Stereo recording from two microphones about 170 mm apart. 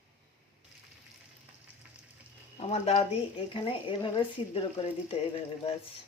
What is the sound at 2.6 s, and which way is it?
Speech, 40° left (ahead or behind).